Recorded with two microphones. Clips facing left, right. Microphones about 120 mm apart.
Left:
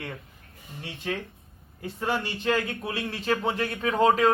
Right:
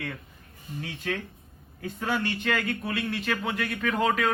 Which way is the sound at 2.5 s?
30° left (ahead or behind).